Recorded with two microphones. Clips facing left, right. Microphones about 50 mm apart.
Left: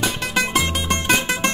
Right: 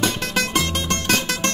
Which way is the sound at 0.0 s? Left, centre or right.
Centre.